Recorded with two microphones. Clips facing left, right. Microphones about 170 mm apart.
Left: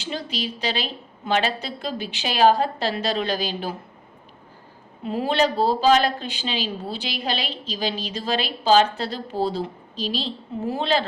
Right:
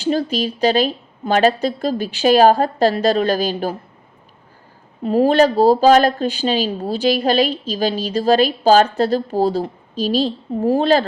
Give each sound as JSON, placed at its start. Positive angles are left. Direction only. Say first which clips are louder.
{"t": 0.0, "sound": "speech", "louder": "right 10 dB", "side_deg": -45}
{"t": 5.0, "sound": "speech", "louder": "right 8 dB", "side_deg": -45}